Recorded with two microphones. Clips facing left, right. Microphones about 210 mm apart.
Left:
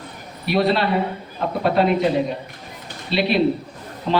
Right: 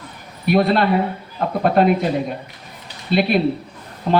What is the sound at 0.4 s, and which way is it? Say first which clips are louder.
Speech: right 3 dB; 50° right (ahead or behind).